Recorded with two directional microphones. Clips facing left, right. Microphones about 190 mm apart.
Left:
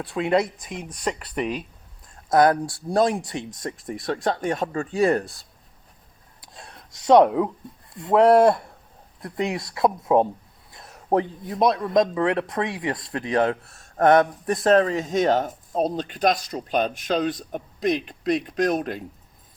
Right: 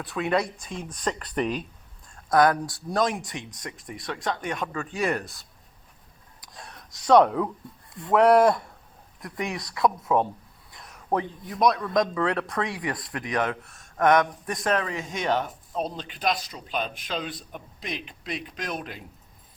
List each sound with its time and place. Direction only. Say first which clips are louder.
0.0 s speech: left 4 dB; 25° left (ahead or behind); by 1.6 s 10° left (ahead or behind)
2.3 s a man's voice: left 3 dB; 25° left (ahead or behind)
6.4 s a sound: even; 25° left (ahead or behind)
8.0 s a man's voice: left 3 dB; 25° left (ahead or behind); by 19.0 s 45° left (ahead or behind)